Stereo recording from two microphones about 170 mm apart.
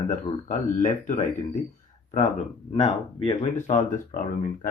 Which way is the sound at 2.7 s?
30° left (ahead or behind).